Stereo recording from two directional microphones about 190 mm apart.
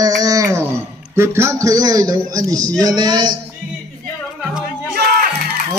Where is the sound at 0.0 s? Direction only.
20° right (ahead or behind).